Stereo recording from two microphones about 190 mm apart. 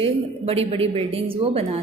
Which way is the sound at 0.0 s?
30° right (ahead or behind).